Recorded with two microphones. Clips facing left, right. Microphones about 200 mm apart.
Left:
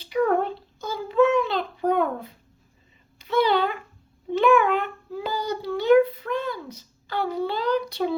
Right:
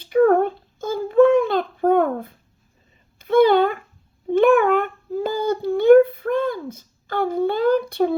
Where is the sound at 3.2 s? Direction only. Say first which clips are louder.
Right 7 dB; 50° right (ahead or behind).